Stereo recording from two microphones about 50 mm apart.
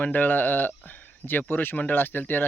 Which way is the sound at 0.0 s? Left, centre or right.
Left.